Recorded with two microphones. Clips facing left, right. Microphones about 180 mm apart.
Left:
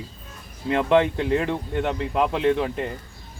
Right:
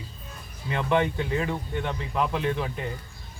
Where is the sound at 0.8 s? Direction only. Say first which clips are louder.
Left 5 dB; 65° left (ahead or behind).